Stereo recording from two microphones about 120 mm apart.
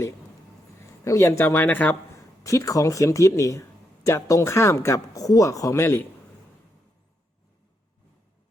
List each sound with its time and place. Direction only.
0.8 s a man's voice: 25° left (ahead or behind)
2.1 s speech: 25° left (ahead or behind)